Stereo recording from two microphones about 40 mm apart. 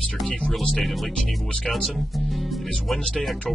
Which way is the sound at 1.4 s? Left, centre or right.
Centre.